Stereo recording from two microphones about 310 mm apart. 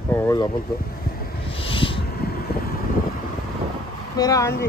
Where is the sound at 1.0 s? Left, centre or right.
Left.